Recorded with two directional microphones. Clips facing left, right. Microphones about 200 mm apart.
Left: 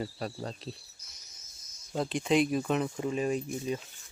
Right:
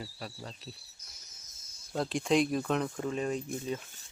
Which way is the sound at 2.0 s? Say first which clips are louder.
Left 1 dB; centre (ahead or behind).